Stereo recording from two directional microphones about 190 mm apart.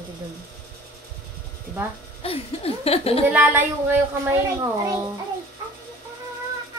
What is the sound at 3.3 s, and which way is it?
A woman's voice, 10° right (ahead or behind).